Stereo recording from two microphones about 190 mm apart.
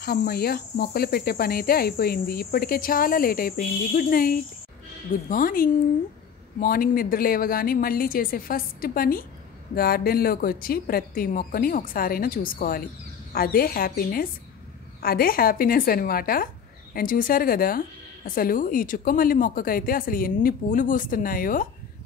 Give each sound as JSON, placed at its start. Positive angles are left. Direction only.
{"t": 0.0, "sound": "a woman's voice", "side_deg": 55}